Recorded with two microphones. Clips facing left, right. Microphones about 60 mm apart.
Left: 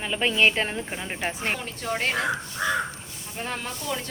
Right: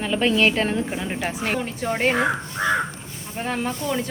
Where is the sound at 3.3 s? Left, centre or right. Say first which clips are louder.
Right 6 dB; centre.